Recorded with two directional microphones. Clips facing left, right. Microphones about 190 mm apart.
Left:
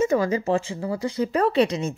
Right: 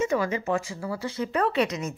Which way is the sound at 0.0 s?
40° left (ahead or behind).